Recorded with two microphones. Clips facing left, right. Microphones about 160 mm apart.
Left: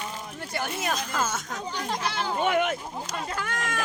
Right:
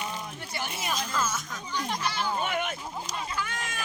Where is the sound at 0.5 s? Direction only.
50° left (ahead or behind).